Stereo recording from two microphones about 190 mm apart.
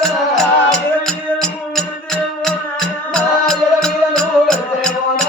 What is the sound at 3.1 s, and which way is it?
Music, 5° left (ahead or behind).